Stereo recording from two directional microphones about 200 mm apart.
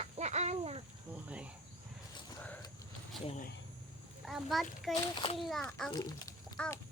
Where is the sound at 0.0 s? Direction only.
35° right (ahead or behind).